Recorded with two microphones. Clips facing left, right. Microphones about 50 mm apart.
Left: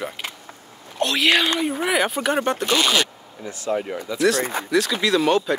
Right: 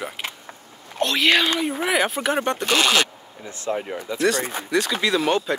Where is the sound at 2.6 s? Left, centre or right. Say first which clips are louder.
Right 2 dB; right.